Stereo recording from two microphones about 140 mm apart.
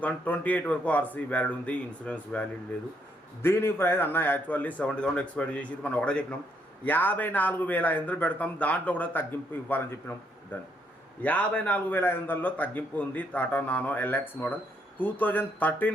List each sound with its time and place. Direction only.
0.0 s a man's voice: 10° left (ahead or behind)
3.4 s a man's voice: 15° left (ahead or behind)